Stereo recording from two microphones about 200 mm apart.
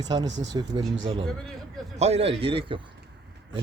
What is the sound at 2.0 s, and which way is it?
Speech, 30° right (ahead or behind).